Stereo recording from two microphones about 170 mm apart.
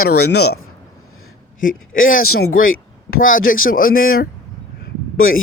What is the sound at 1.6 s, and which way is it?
Speech, 55° left (ahead or behind).